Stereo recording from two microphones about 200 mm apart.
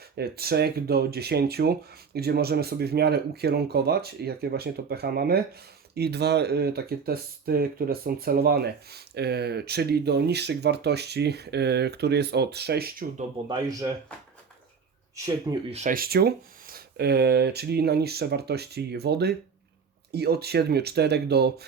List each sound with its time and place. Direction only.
0.2 s speech: 50° right (ahead or behind)
13.5 s speech: 20° right (ahead or behind)
15.7 s speech: 40° right (ahead or behind)